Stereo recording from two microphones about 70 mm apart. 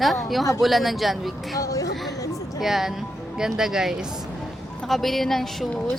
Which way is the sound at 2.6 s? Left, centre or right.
Centre.